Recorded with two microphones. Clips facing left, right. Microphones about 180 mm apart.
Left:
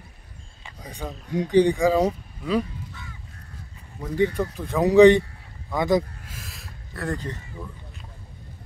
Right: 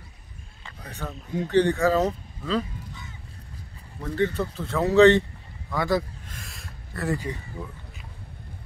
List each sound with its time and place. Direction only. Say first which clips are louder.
0.7 s speech: left 2 dB; 15° left (ahead or behind)
4.0 s speech: left 2 dB; 10° left (ahead or behind)
6.2 s a sound: left 1 dB; centre (ahead or behind)
7.6 s speech: right 1 dB; centre (ahead or behind)